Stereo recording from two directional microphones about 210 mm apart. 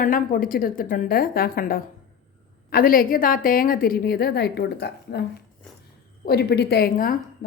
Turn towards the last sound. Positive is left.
turn(degrees=40)  # may be behind; listen again after turning